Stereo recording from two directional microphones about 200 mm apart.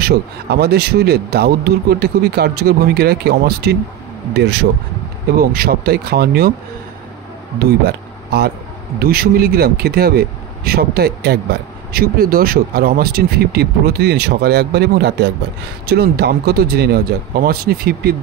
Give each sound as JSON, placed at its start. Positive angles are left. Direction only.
{"t": 0.0, "sound": "speech", "side_deg": -55}
{"t": 7.5, "sound": "speech", "side_deg": -55}